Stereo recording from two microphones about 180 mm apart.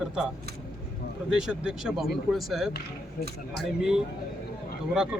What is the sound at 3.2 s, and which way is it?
Speech, 55° left (ahead or behind).